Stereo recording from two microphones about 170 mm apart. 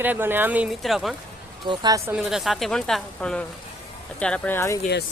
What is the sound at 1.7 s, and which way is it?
Speech, 20° right (ahead or behind).